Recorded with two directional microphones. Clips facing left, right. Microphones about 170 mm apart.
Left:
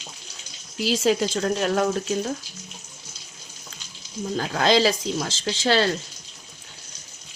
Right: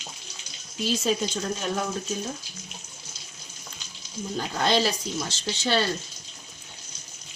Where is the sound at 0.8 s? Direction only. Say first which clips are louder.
Left 4 dB; 90° left.